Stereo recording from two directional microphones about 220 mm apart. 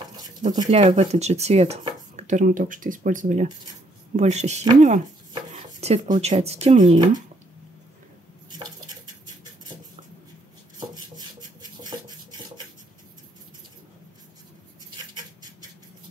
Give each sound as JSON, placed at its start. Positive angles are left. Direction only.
{"t": 0.5, "sound": "speech", "side_deg": -25}
{"t": 8.5, "sound": "dishes", "side_deg": -20}
{"t": 15.1, "sound": "a sound", "side_deg": -15}